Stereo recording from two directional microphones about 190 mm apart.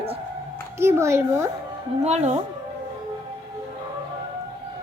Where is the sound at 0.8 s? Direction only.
15° right (ahead or behind).